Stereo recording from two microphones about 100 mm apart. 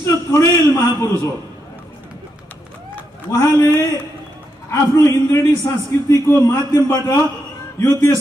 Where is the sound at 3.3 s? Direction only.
30° left (ahead or behind).